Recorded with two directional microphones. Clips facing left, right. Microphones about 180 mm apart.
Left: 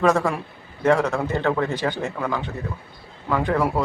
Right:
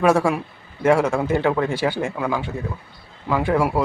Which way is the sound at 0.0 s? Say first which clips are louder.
Right 2 dB; 10° right (ahead or behind).